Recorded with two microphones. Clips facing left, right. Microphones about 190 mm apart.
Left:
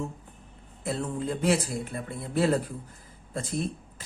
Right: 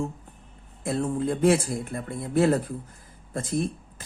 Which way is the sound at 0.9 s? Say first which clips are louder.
Right 4 dB; 50° right (ahead or behind).